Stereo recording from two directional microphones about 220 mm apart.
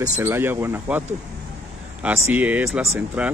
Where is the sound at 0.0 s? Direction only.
15° right (ahead or behind).